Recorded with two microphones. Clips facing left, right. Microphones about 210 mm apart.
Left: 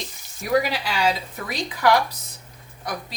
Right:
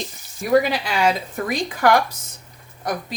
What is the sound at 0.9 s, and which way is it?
Speech, 50° right (ahead or behind).